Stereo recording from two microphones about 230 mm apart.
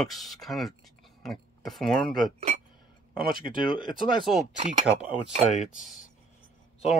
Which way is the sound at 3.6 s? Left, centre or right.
Centre.